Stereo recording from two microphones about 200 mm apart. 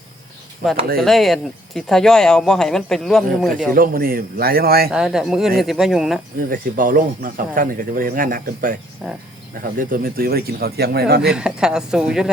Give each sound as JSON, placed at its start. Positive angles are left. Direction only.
{"t": 0.9, "sound": "speech", "side_deg": 0}
{"t": 3.7, "sound": "speech", "side_deg": -45}
{"t": 4.9, "sound": "speech", "side_deg": -5}
{"t": 6.5, "sound": "speech", "side_deg": -45}
{"t": 9.0, "sound": "speech", "side_deg": 0}
{"t": 9.7, "sound": "speech", "side_deg": -45}
{"t": 11.2, "sound": "speech", "side_deg": -5}